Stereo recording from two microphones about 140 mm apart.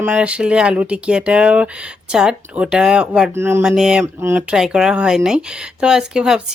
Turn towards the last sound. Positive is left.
turn(degrees=-5)  # may be behind; listen again after turning